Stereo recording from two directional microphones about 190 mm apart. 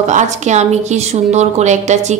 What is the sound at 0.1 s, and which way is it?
Speech, 40° right (ahead or behind).